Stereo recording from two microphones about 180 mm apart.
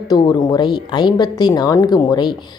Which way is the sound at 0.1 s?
20° left (ahead or behind).